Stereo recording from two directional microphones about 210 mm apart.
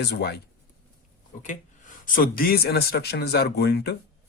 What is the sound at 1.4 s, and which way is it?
Speech, 40° left (ahead or behind).